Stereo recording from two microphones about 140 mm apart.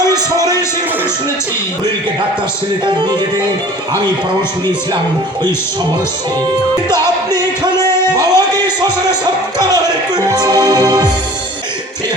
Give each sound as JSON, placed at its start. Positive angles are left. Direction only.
{"t": 6.9, "sound": "music", "side_deg": -30}